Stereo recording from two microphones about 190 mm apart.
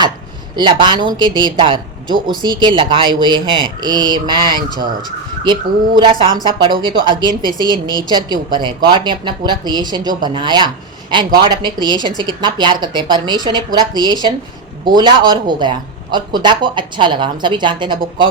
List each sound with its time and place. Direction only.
0.5 s speech: 25° right (ahead or behind)
6.0 s speech: 25° right (ahead or behind)
7.9 s a woman's voice: 20° left (ahead or behind)
8.1 s speech: 25° right (ahead or behind)